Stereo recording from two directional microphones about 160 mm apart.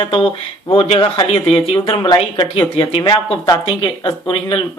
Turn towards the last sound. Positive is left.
turn(degrees=30)  # may be behind; listen again after turning